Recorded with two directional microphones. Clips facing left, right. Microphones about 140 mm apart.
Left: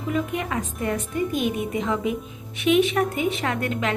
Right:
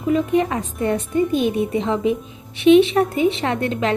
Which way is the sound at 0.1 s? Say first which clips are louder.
Right 8 dB; 30° right (ahead or behind).